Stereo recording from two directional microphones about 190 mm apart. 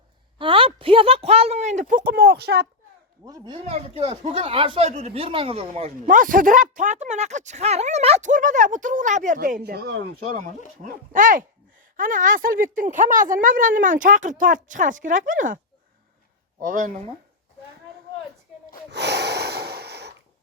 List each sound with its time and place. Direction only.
0.3 s speech: 25° right (ahead or behind); by 2.6 s 55° right (ahead or behind)
3.2 s speech: 20° right (ahead or behind)
6.1 s speech: 45° right (ahead or behind)
10.8 s a woman's voice: 45° right (ahead or behind)
16.6 s a woman's voice: 45° right (ahead or behind)
18.9 s breathing: 60° right (ahead or behind)